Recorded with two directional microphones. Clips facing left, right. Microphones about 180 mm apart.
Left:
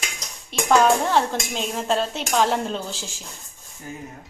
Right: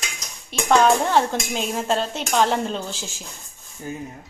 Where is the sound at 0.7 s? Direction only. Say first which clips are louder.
Right 1 dB; centre (ahead or behind).